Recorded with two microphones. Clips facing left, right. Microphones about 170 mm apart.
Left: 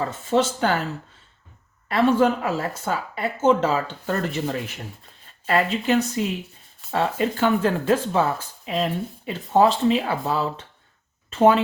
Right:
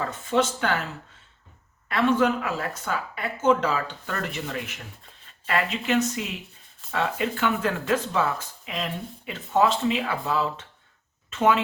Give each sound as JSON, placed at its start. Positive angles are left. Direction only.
{"t": 0.0, "sound": "speech", "side_deg": 30}
{"t": 1.9, "sound": "speech", "side_deg": 30}